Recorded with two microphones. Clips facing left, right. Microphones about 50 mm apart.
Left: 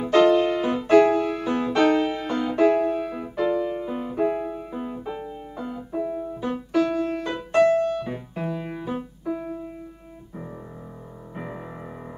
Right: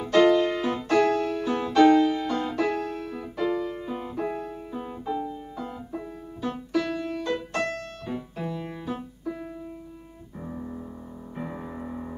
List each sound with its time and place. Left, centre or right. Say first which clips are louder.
0.0 s music: left 2 dB; centre; by 7.1 s left
7.2 s piano: left 11 dB; centre
11.3 s music: even; centre